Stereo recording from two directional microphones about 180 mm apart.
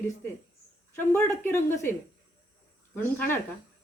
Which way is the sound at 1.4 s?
15° left (ahead or behind).